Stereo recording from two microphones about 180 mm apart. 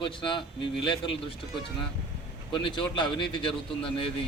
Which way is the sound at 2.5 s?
25° left (ahead or behind).